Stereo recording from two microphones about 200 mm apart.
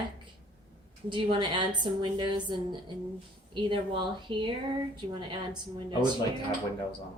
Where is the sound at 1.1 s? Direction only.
25° right (ahead or behind).